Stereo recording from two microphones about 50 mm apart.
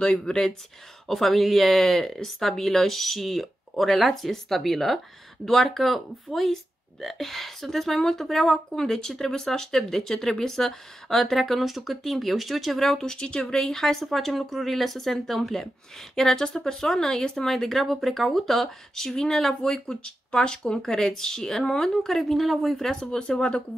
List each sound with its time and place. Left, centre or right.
0.0 s speech: centre
1.0 s speech: centre
22.9 s speech: centre